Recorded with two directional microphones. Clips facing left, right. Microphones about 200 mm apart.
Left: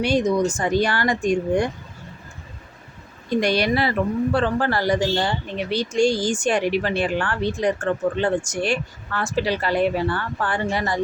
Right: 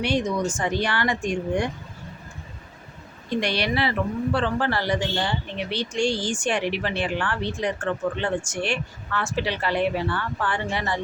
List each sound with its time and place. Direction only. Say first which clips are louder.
0.0 s speech: left 5 dB; 40° left (ahead or behind)
3.4 s a man's voice: left 4 dB; 45° left (ahead or behind)